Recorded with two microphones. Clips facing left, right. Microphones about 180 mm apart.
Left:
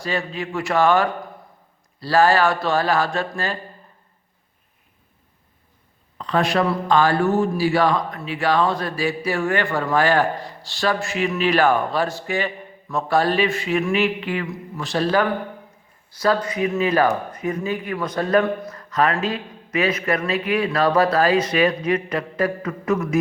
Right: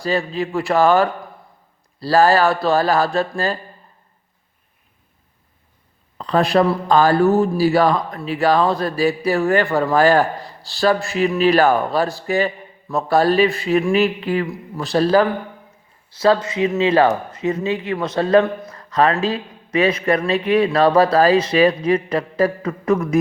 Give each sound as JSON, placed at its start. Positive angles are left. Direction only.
{"t": 0.0, "sound": "a man's voice", "side_deg": -35}
{"t": 6.1, "sound": "a man's voice", "side_deg": -35}
{"t": 16.1, "sound": "a man's voice", "side_deg": -25}